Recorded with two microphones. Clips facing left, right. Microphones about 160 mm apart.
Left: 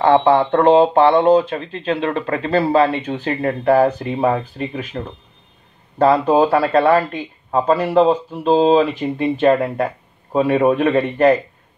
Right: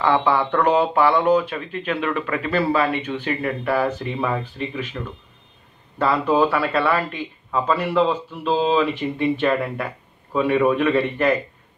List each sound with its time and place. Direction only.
0.1 s speech: 50° left (ahead or behind)
0.5 s speech: 30° left (ahead or behind)